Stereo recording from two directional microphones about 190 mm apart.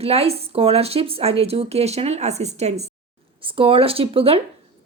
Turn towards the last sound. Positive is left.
turn(degrees=-30)  # may be behind; listen again after turning